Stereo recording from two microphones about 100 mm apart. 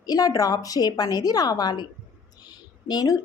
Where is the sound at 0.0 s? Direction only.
40° left (ahead or behind).